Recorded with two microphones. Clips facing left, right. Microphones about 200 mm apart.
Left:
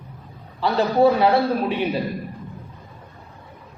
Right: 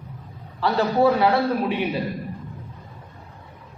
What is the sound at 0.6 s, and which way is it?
A man's voice, 20° left (ahead or behind).